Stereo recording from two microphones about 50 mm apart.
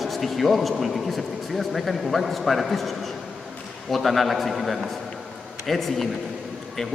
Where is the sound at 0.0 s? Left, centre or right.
Centre.